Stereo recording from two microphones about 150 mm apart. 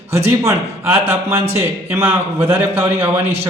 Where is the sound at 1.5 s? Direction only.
15° right (ahead or behind).